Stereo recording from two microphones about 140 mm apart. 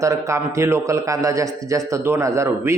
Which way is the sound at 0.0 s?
20° right (ahead or behind).